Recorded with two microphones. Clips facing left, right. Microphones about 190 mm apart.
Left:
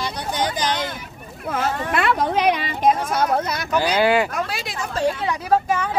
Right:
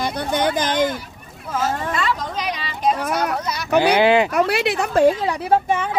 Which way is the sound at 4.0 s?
20° right (ahead or behind).